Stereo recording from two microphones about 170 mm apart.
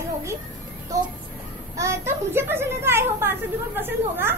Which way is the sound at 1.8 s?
15° right (ahead or behind).